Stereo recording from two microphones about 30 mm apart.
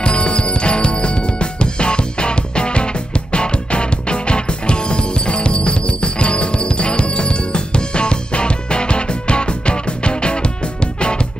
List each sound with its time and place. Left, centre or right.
0.0 s music: left